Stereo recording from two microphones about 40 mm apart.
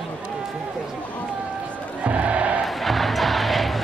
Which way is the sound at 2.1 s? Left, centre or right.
Right.